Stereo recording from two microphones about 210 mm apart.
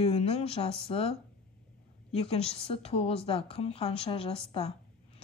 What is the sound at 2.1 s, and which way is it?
Speech, 30° left (ahead or behind).